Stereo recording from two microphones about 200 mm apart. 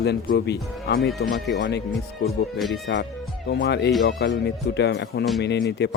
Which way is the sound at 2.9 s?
60° left (ahead or behind).